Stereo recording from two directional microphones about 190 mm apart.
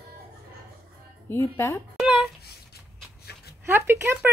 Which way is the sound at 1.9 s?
5° right (ahead or behind).